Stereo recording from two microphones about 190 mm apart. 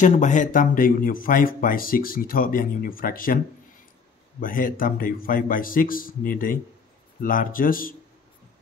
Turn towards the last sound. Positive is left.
turn(degrees=50)  # may be behind; listen again after turning